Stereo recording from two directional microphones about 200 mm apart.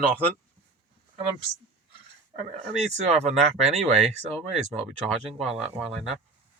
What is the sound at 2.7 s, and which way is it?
Speech, 35° right (ahead or behind).